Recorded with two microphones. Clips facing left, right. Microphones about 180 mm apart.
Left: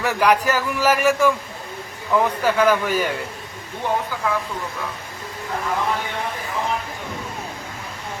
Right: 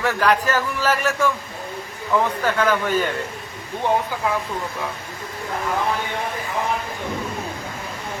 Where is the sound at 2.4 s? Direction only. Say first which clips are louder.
Left 2 dB; 10° left (ahead or behind).